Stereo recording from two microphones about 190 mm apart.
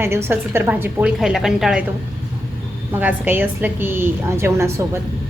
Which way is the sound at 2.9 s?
10° right (ahead or behind).